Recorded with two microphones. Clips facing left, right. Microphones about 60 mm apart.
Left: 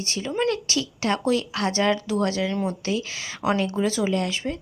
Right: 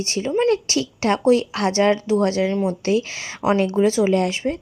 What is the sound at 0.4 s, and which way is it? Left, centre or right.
Speech, right.